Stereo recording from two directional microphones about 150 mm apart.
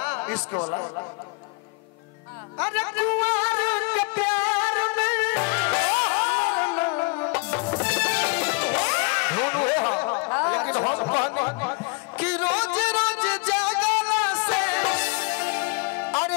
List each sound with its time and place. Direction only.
0.0 s a man's voice: 20° left (ahead or behind)
2.6 s music: 10° left (ahead or behind)
10.1 s a sound: 20° left (ahead or behind)
12.2 s music: 10° left (ahead or behind)